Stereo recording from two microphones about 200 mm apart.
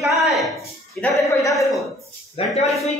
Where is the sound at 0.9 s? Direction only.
15° left (ahead or behind).